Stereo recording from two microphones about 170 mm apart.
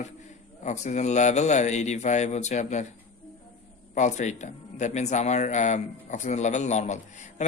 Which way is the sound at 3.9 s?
45° left (ahead or behind).